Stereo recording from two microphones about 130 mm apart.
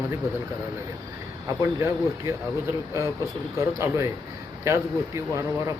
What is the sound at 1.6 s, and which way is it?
Speech, 20° right (ahead or behind).